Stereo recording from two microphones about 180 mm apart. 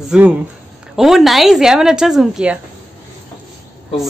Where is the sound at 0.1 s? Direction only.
5° right (ahead or behind).